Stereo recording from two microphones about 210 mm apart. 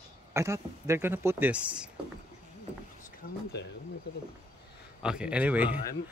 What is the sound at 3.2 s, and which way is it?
Speech, 45° left (ahead or behind).